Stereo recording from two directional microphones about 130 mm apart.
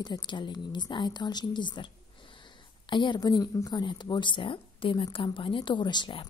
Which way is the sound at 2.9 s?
35° left (ahead or behind).